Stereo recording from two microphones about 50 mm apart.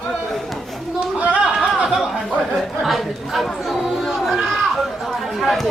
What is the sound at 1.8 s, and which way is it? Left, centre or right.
Speech, centre.